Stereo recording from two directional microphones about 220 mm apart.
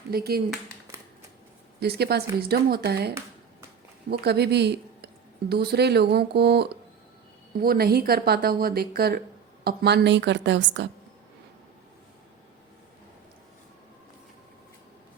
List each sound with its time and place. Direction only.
0.1 s speech: 45° right (ahead or behind)
1.8 s speech: 45° right (ahead or behind)
4.1 s speech: 45° right (ahead or behind)